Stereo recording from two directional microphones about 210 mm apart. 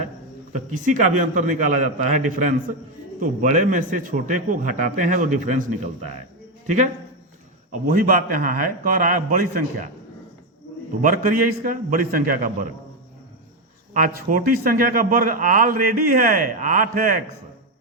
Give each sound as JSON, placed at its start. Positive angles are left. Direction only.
{"t": 0.5, "sound": "a man's voice", "side_deg": -40}
{"t": 11.0, "sound": "a man's voice", "side_deg": -40}
{"t": 13.9, "sound": "a man's voice", "side_deg": -40}